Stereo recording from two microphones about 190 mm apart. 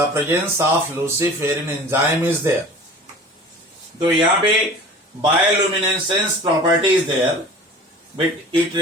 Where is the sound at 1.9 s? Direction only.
15° right (ahead or behind).